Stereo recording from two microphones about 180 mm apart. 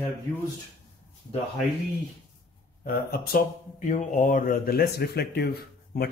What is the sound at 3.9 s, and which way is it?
Speech, 45° left (ahead or behind).